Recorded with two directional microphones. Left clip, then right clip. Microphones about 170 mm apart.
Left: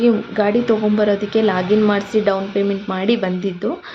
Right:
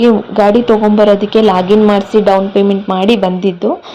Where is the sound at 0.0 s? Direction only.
25° right (ahead or behind).